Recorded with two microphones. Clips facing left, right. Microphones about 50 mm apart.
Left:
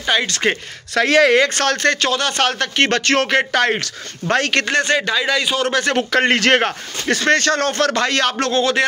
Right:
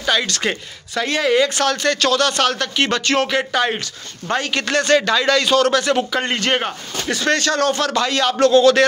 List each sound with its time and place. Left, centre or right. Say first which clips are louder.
0.0 s speech: left 1 dB; left
0.9 s speech: left 6 dB; left
1.3 s speech: left 1 dB; left
2.0 s speech: right 1 dB; left
4.6 s a man's voice: right 1 dB; left
5.7 s speech: right 1 dB; left
6.1 s a man's voice: left 5 dB; left
7.1 s speech: left 3 dB; left